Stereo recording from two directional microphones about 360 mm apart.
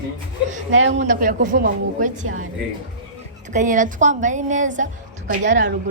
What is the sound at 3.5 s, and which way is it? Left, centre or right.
A woman's voice, right.